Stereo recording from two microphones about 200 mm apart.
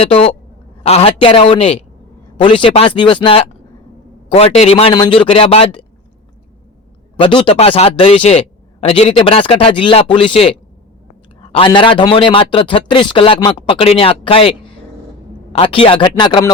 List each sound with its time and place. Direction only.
0.0 s a man's voice: 30° left (ahead or behind)
7.2 s a man's voice: 25° left (ahead or behind)
11.5 s a man's voice: 25° left (ahead or behind)